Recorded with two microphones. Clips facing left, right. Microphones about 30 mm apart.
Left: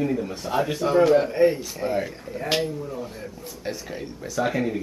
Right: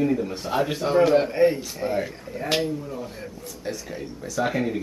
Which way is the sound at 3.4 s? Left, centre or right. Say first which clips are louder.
Even; centre.